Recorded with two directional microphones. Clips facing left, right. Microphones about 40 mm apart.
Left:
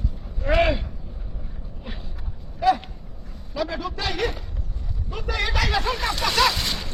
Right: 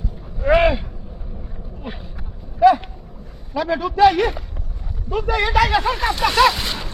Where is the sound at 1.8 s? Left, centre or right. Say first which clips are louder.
Right 6 dB; right.